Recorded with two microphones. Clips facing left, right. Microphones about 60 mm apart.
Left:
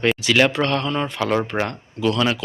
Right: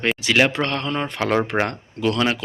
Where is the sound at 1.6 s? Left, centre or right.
Right.